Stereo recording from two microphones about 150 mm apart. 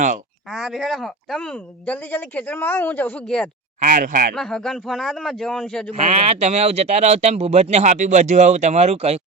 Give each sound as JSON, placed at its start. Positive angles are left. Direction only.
{"t": 0.5, "sound": "speech", "side_deg": 0}
{"t": 3.8, "sound": "speech", "side_deg": -60}
{"t": 4.4, "sound": "a man's voice", "side_deg": 5}
{"t": 5.9, "sound": "speech", "side_deg": -45}